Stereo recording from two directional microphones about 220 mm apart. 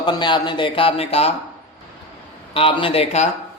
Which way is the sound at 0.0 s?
20° left (ahead or behind).